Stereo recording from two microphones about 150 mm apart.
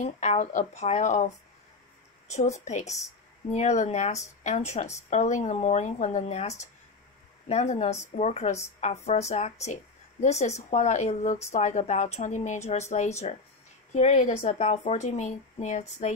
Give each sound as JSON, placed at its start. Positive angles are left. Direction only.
{"t": 0.0, "sound": "a woman's voice", "side_deg": 50}